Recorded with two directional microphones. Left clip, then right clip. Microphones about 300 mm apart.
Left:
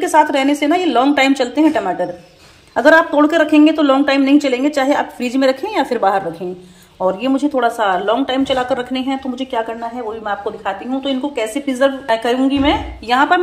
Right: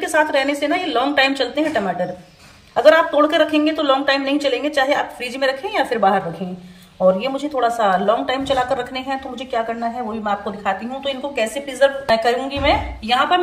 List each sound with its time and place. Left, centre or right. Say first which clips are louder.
0.0 s a woman's voice: left 4 dB; centre
2.7 s a woman's voice: left 2 dB; centre